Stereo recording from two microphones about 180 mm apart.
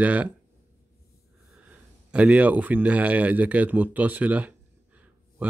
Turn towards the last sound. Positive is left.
turn(degrees=-10)  # may be behind; listen again after turning